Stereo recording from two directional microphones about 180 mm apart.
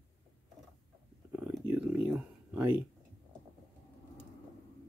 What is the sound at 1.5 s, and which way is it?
Speech, 5° right (ahead or behind).